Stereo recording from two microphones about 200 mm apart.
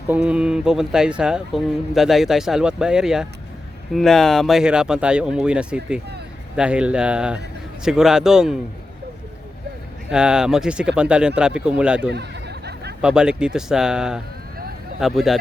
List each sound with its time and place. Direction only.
0.1 s speech: 5° right (ahead or behind)
10.1 s speech: 5° right (ahead or behind)
12.1 s a sound: 55° right (ahead or behind)
13.0 s speech: 5° right (ahead or behind)